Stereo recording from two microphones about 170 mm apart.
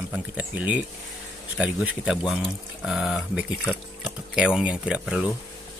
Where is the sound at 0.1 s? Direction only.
10° right (ahead or behind).